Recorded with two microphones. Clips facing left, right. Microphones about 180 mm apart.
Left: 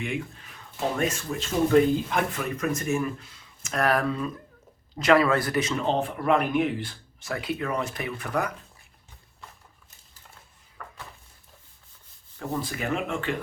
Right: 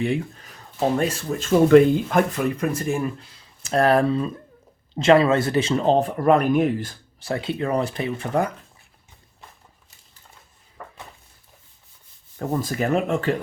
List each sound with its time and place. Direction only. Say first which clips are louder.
0.0 s speech: right 7 dB; 35° right (ahead or behind)
1.7 s speech: right 7 dB; 80° right
2.1 s speech: right 7 dB; 45° right (ahead or behind)
2.6 s speech: right 3 dB; 30° right (ahead or behind)
10.8 s a sound: right 4 dB; 25° right (ahead or behind)
12.4 s speech: right 6 dB; 45° right (ahead or behind)